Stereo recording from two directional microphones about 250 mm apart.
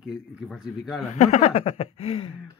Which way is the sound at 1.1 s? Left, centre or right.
Left.